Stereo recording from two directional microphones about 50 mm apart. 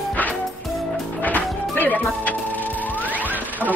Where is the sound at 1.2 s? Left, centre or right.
Left.